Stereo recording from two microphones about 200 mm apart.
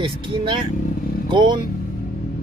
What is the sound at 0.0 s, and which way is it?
Speech, 25° right (ahead or behind).